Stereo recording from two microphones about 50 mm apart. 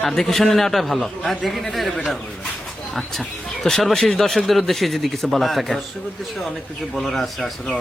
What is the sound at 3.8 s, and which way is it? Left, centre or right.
A man's voice, centre.